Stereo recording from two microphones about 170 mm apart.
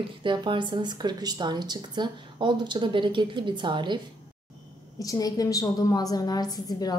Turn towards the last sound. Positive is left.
turn(degrees=20)  # may be behind; listen again after turning